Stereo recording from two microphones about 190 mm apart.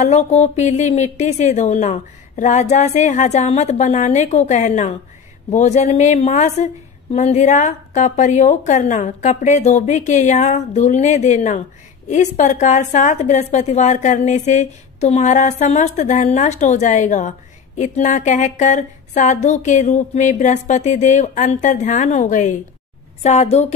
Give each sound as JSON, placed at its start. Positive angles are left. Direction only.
{"t": 0.0, "sound": "a woman's voice", "side_deg": 35}